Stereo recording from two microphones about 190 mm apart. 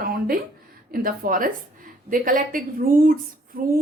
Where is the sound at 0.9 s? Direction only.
50° right (ahead or behind).